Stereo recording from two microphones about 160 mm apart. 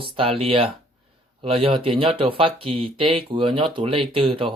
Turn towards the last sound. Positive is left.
turn(degrees=-35)  # may be behind; listen again after turning